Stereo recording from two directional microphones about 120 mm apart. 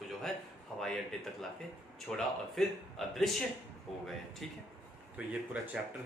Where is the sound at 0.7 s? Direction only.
5° left (ahead or behind).